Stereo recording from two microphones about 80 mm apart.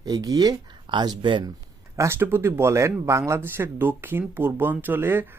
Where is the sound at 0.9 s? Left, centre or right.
Right.